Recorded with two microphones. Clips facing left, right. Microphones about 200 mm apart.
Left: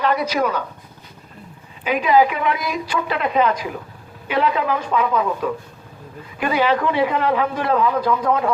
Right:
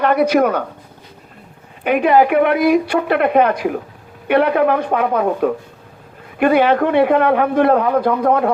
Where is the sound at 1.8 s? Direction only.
60° right (ahead or behind).